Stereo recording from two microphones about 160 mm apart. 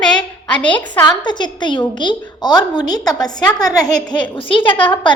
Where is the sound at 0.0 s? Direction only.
5° left (ahead or behind).